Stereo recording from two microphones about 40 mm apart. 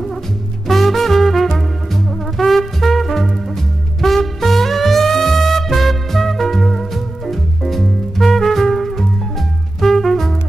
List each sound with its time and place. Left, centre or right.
0.7 s music: centre